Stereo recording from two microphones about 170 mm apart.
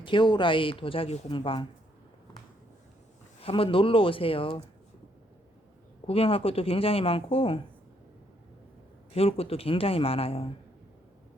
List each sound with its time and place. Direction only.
0.0 s speech: 30° left (ahead or behind)
3.4 s speech: 30° left (ahead or behind)
6.1 s speech: 35° left (ahead or behind)
9.1 s speech: 35° left (ahead or behind)